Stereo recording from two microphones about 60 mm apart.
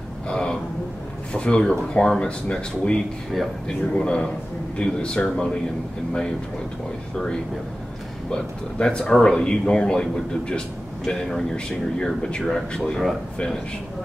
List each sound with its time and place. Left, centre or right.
0.3 s a sound: centre
1.3 s speech: centre
8.3 s speech: centre
11.1 s speech: centre